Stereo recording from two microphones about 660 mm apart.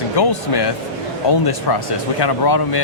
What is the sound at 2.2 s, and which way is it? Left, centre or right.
Speech, left.